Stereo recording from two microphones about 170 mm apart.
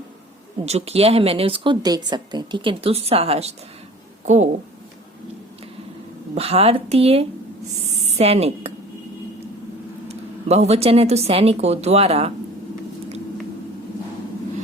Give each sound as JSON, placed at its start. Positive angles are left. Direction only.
{"t": 0.6, "sound": "speech", "side_deg": -40}
{"t": 6.3, "sound": "speech", "side_deg": -35}
{"t": 7.9, "sound": "a sound", "side_deg": -40}
{"t": 10.1, "sound": "speech", "side_deg": -40}